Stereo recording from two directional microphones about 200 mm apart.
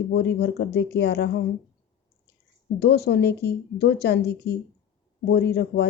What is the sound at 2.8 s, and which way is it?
Speech, 55° left (ahead or behind).